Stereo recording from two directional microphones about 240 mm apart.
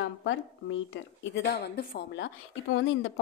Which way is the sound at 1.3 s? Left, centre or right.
Left.